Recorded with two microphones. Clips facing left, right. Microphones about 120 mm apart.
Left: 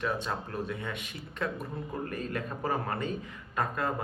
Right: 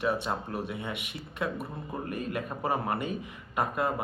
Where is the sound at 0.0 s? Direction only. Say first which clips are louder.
Right 3 dB; 15° right (ahead or behind).